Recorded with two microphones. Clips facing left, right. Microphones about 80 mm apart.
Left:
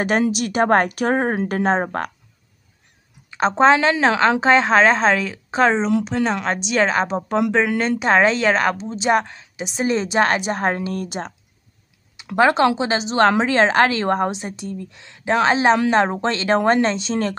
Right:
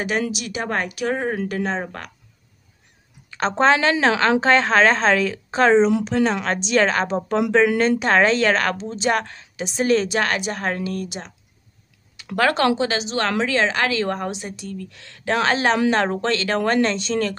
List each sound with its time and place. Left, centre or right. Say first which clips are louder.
0.3 s speech: left 9 dB; left
3.3 s speech: left 3 dB; centre; by 11.3 s left
12.4 s a woman's voice: left 4 dB; centre
12.8 s a woman's voice: left 5 dB; left